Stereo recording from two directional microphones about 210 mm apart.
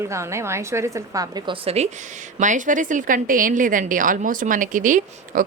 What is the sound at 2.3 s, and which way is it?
A woman's voice, 35° right (ahead or behind).